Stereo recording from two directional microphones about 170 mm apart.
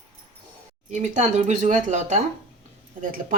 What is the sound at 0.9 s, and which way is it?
Speech, 45° right (ahead or behind).